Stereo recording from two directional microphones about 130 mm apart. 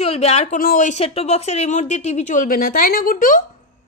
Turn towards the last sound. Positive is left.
turn(degrees=90)